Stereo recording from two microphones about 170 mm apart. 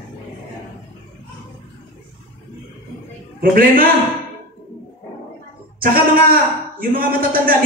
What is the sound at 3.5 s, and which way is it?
Speech, 55° right (ahead or behind).